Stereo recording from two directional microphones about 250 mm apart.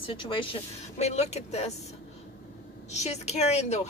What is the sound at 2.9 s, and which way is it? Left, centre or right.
Speech, left.